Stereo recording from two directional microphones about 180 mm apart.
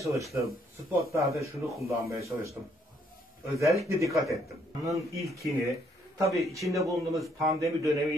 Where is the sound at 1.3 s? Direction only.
15° right (ahead or behind).